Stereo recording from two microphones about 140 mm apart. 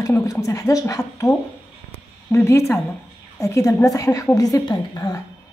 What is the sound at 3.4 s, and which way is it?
Speech, 25° left (ahead or behind).